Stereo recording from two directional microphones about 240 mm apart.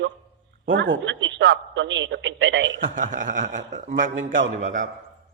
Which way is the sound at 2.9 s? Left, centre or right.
Right.